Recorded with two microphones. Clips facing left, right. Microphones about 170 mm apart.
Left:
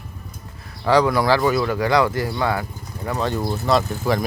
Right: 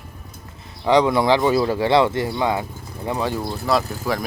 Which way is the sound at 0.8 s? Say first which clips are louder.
Right 1 dB; 20° right (ahead or behind).